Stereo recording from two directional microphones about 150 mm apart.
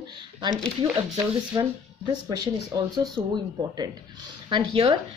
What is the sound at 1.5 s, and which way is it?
A woman's voice, 25° right (ahead or behind).